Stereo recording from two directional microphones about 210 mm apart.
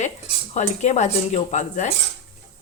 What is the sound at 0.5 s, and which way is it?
Speech, 35° left (ahead or behind).